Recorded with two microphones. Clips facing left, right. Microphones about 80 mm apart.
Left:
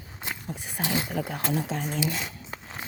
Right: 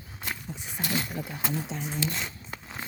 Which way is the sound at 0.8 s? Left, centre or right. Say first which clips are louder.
Left 2 dB; left.